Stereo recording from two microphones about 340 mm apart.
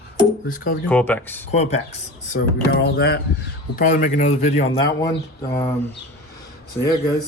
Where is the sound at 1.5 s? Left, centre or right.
Centre.